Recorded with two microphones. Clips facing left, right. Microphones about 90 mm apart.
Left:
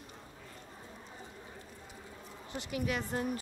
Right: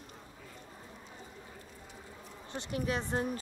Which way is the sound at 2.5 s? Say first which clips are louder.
Right 1 dB; 35° right (ahead or behind).